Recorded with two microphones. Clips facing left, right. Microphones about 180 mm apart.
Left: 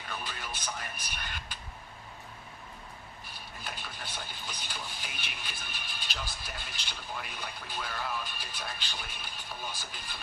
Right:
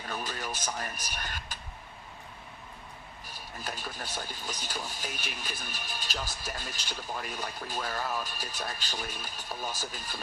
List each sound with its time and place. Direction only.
0.1 s a man's voice: 40° right (ahead or behind)
3.6 s speech: 40° right (ahead or behind)